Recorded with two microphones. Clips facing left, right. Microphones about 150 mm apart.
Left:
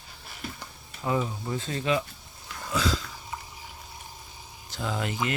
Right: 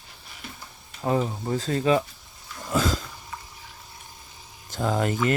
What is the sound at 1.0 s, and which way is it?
Speech, 35° right (ahead or behind).